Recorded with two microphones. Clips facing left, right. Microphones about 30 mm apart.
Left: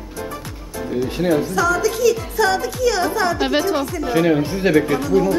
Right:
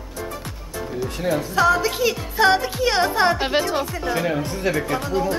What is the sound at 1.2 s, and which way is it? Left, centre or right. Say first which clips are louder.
Speech: left 5 dB; centre.